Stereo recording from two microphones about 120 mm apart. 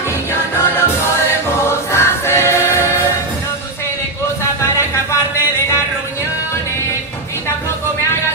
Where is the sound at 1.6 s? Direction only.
20° left (ahead or behind).